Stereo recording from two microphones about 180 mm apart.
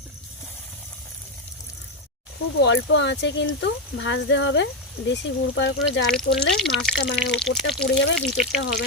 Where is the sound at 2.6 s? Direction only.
80° left.